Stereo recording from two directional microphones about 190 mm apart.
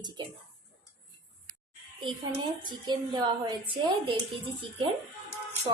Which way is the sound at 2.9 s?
25° right (ahead or behind).